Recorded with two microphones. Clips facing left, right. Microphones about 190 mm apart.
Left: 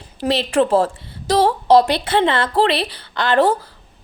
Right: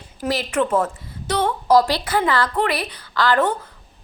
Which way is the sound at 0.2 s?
30° left (ahead or behind).